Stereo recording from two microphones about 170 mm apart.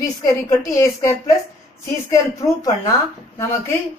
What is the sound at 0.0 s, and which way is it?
A woman's voice, 20° left (ahead or behind).